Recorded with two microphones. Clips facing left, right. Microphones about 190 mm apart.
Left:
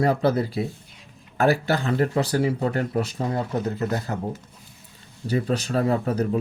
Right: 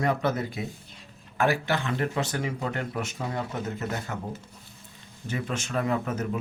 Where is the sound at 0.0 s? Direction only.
35° left (ahead or behind).